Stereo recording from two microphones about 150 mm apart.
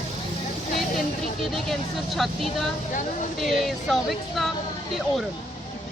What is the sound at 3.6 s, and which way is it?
Speech, centre (ahead or behind).